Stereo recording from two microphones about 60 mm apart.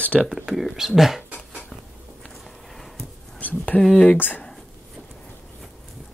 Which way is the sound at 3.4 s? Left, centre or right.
Left.